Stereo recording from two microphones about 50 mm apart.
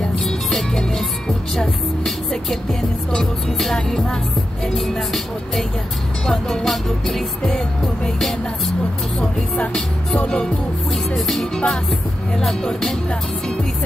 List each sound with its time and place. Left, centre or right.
0.0 s music: centre
4.6 s speech: centre
6.2 s music: centre
10.2 s music: left
10.9 s music: centre